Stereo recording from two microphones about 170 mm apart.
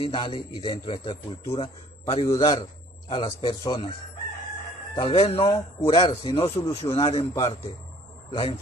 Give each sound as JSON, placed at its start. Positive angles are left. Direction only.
{"t": 0.0, "sound": "a man's voice", "side_deg": 30}
{"t": 3.6, "sound": "chicken", "side_deg": 25}
{"t": 4.9, "sound": "a man's voice", "side_deg": 35}